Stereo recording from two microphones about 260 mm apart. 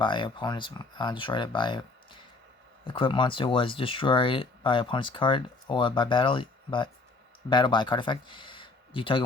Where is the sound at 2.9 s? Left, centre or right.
Centre.